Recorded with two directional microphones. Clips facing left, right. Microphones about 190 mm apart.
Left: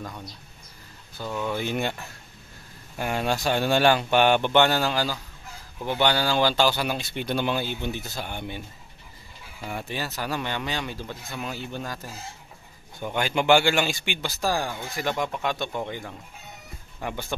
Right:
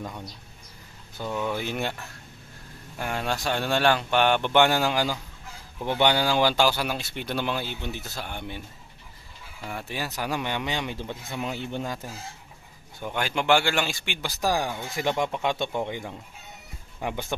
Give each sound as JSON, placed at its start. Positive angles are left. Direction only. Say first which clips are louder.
{"t": 1.3, "sound": "speech", "louder": "left 1 dB", "side_deg": -5}
{"t": 3.0, "sound": "speech", "louder": "left 3 dB", "side_deg": 5}
{"t": 4.5, "sound": "speech", "louder": "even", "side_deg": -10}
{"t": 9.8, "sound": "speech", "louder": "right 1 dB", "side_deg": -10}
{"t": 13.0, "sound": "speech", "louder": "left 3 dB", "side_deg": 0}
{"t": 14.2, "sound": "speech", "louder": "right 1 dB", "side_deg": -15}